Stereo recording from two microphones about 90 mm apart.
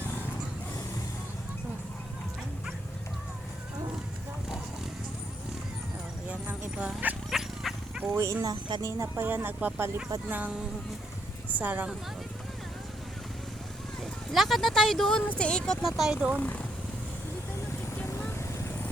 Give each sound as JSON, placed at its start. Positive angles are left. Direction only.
{"t": 6.2, "sound": "a sound", "side_deg": -15}
{"t": 7.3, "sound": "wild animals", "side_deg": 0}
{"t": 7.9, "sound": "dog", "side_deg": -25}
{"t": 8.8, "sound": "a woman's voice", "side_deg": -30}
{"t": 11.5, "sound": "a woman's voice", "side_deg": -20}
{"t": 14.0, "sound": "speech", "side_deg": 0}
{"t": 16.3, "sound": "speech", "side_deg": 15}
{"t": 18.2, "sound": "vehicle", "side_deg": 25}